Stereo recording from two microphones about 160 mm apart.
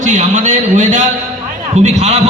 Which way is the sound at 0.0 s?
50° right (ahead or behind).